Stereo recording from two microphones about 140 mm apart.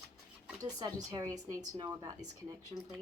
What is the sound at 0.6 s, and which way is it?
Speech, 30° right (ahead or behind).